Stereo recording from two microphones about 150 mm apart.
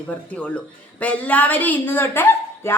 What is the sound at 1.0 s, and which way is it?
Speech, 10° left (ahead or behind).